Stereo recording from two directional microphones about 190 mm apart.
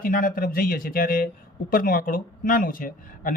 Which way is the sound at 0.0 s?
45° left (ahead or behind).